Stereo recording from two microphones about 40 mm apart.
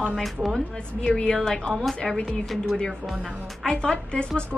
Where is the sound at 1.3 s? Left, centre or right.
Centre.